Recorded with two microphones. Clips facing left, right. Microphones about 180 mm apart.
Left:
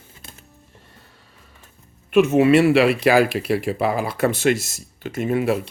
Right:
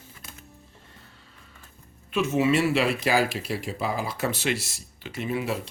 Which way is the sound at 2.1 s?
60° left (ahead or behind).